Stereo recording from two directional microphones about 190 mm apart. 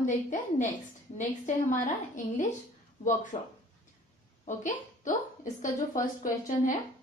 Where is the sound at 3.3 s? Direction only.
35° left (ahead or behind).